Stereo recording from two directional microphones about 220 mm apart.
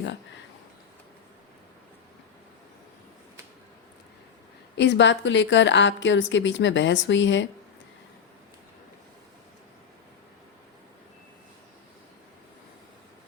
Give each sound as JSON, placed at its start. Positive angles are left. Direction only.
{"t": 4.8, "sound": "a woman's voice", "side_deg": 55}